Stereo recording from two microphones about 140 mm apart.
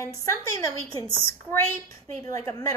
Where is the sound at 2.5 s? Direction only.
25° left (ahead or behind).